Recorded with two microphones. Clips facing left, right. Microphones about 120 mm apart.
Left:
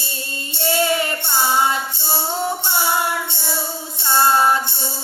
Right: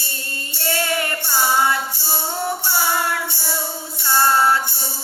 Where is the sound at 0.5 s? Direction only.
20° left (ahead or behind).